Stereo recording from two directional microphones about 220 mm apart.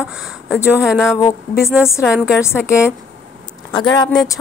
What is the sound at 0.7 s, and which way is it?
Speech, 5° right (ahead or behind).